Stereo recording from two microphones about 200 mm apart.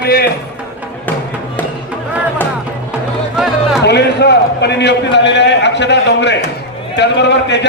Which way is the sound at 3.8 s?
55° left (ahead or behind).